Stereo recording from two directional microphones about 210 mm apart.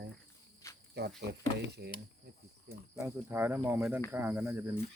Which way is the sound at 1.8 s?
50° right (ahead or behind).